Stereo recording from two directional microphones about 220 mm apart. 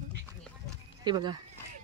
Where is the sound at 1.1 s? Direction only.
20° right (ahead or behind).